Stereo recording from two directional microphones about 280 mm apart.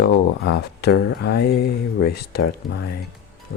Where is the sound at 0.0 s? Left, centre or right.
Left.